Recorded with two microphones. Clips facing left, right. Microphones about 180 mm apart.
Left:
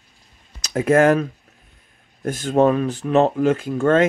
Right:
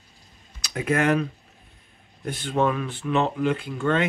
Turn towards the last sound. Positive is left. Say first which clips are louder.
# left 7 dB
turn(degrees=45)  # may be behind; listen again after turning